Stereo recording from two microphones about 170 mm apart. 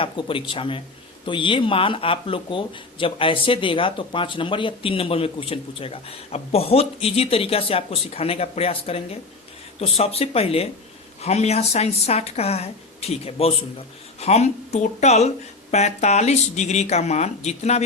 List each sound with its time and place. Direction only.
0.0 s speech: 30° left (ahead or behind)